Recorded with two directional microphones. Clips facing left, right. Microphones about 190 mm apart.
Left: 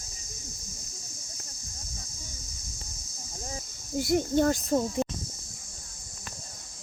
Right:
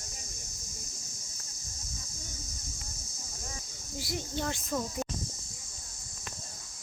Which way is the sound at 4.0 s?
50° left (ahead or behind).